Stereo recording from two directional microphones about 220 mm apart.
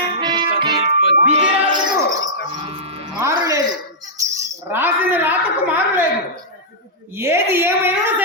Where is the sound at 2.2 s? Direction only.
20° right (ahead or behind).